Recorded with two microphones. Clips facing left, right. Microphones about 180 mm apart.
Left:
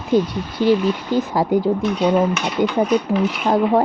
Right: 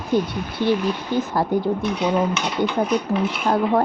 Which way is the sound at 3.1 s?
15° left (ahead or behind).